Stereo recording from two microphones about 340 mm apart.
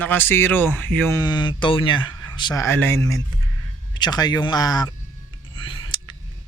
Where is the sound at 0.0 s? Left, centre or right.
Centre.